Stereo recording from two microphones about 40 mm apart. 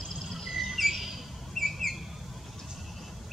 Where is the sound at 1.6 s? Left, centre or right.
Centre.